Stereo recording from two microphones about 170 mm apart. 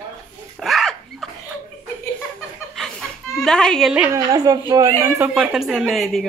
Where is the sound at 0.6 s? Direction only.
Centre (ahead or behind).